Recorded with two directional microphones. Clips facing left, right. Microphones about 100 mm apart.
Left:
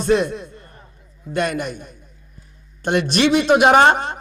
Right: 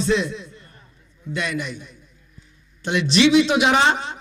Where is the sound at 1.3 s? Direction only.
50° left (ahead or behind).